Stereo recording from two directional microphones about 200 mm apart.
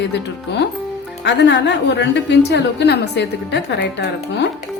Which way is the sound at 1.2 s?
60° left (ahead or behind).